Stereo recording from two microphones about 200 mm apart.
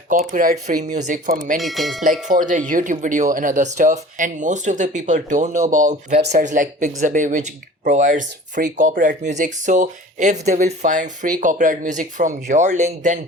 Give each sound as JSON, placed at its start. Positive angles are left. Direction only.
{"t": 0.3, "sound": "speech", "side_deg": -45}
{"t": 1.5, "sound": "speech", "side_deg": 0}
{"t": 2.2, "sound": "speech", "side_deg": -40}